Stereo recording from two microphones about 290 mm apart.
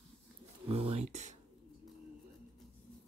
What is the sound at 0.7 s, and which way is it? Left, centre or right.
Speech, right.